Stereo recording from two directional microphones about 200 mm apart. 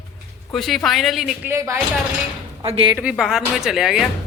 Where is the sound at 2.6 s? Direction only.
25° right (ahead or behind).